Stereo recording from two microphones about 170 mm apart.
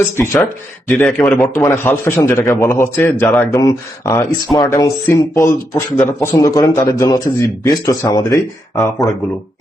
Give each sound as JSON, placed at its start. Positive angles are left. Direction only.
{"t": 0.2, "sound": "speech", "side_deg": 10}